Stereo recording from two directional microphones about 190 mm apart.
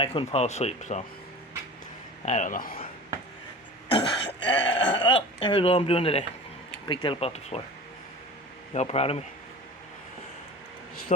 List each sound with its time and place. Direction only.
0.0 s speech: 30° left (ahead or behind)
2.2 s speech: 40° left (ahead or behind)
3.8 s cough: 25° left (ahead or behind)
4.4 s speech: 25° left (ahead or behind)
8.7 s speech: 35° left (ahead or behind)